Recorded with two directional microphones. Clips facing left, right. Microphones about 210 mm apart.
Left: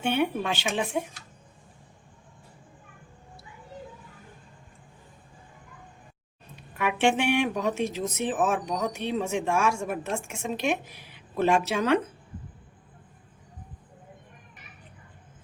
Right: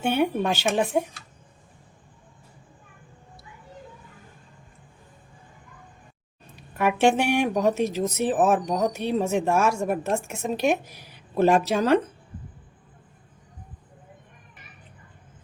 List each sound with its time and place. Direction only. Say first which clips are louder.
0.0 s speech: right 3 dB; 40° right (ahead or behind)
6.7 s speech: right 4 dB; 40° right (ahead or behind)